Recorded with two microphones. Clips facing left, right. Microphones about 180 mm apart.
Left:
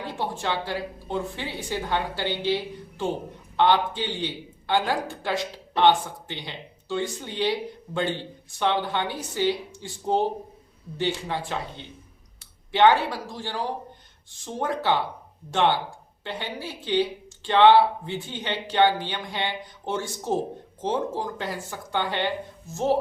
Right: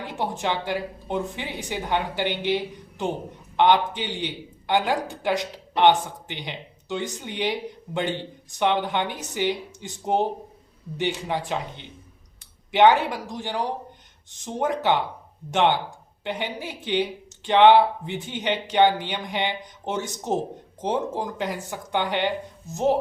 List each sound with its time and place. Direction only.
0.0 s speech: 15° right (ahead or behind)